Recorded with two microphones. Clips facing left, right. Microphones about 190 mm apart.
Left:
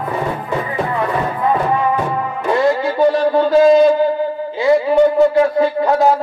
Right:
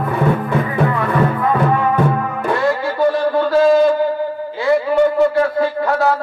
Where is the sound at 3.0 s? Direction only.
20° left (ahead or behind).